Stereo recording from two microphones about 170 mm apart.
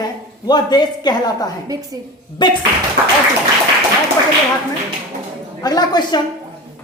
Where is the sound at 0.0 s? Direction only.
25° left (ahead or behind).